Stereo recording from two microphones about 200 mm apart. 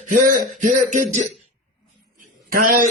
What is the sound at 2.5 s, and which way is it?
Speech, 45° right (ahead or behind).